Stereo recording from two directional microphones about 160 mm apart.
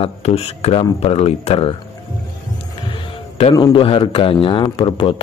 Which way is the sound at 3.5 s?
30° left (ahead or behind).